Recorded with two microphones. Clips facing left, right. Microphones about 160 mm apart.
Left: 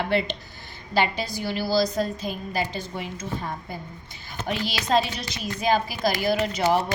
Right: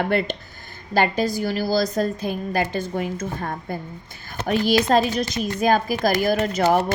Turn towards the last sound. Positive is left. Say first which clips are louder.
# right 3 dB
turn(degrees=-50)  # may be behind; listen again after turning